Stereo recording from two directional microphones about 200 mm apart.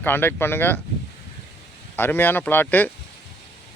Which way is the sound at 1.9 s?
10° left (ahead or behind).